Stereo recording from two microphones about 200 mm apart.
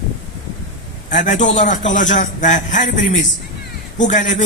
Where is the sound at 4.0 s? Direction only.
40° left (ahead or behind).